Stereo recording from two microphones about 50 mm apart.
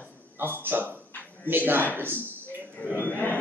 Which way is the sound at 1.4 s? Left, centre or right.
Right.